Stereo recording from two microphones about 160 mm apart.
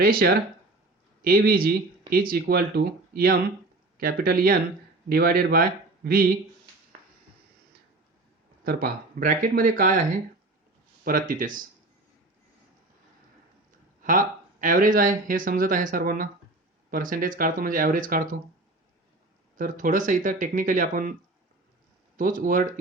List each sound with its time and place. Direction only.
0.0 s speech: 70° right (ahead or behind)
8.6 s speech: 70° right (ahead or behind)
11.0 s speech: 60° right (ahead or behind)
14.0 s speech: 55° right (ahead or behind)
19.5 s speech: 55° right (ahead or behind)
22.2 s speech: 60° right (ahead or behind)